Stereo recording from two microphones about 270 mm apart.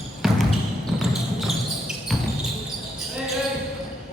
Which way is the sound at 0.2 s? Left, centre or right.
Centre.